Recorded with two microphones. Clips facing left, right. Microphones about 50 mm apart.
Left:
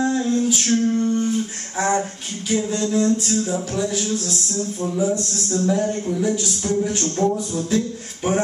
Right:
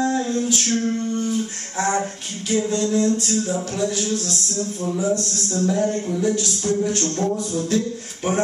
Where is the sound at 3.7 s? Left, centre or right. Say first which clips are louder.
Even; centre.